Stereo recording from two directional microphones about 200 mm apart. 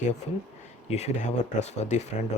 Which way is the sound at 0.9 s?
35° left (ahead or behind).